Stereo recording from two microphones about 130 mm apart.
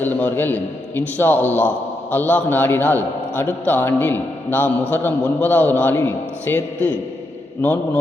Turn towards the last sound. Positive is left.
turn(degrees=15)  # may be behind; listen again after turning